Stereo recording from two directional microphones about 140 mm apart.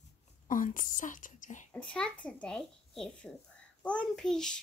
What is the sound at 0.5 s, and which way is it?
Speech, 70° left (ahead or behind).